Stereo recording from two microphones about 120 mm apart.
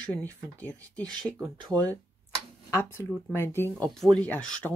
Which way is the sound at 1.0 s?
35° right (ahead or behind).